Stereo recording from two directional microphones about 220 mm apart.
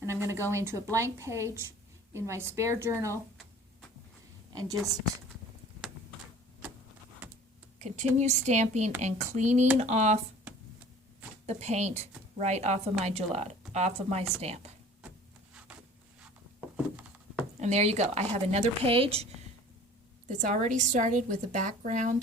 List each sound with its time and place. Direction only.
0.0 s a sound: 15° right (ahead or behind)
0.5 s a woman's voice: 10° right (ahead or behind)
7.8 s a woman's voice: 30° right (ahead or behind)
11.4 s a woman's voice: 30° right (ahead or behind)
15.5 s a sound: 5° right (ahead or behind)
17.6 s a woman's voice: 30° right (ahead or behind)